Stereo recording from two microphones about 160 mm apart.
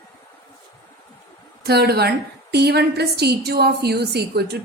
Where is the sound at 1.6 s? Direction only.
90° right.